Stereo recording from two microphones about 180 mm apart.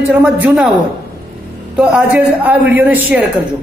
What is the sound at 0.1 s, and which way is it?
Speech, 5° right (ahead or behind).